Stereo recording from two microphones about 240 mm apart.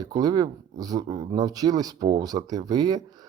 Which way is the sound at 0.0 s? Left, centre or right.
Centre.